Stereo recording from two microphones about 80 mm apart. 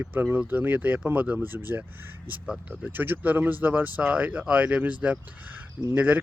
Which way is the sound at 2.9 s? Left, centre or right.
Right.